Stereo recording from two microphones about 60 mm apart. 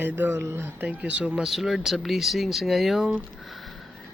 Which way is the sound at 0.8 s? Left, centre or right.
Right.